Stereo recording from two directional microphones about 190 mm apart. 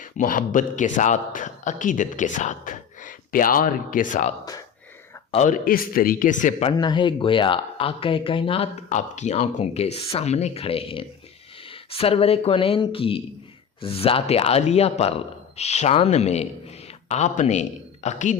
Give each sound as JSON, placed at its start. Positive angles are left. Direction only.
{"t": 0.0, "sound": "a man's voice", "side_deg": 45}
{"t": 6.7, "sound": "a man's voice", "side_deg": 25}